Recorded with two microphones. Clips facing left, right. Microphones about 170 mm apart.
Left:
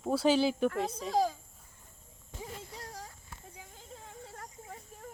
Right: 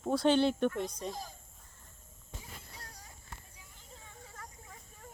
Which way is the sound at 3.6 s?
90° left.